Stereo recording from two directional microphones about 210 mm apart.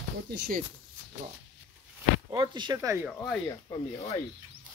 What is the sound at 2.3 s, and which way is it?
Speech, 20° right (ahead or behind).